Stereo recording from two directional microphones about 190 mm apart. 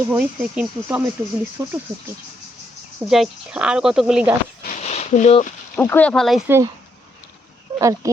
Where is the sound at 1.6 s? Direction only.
20° right (ahead or behind).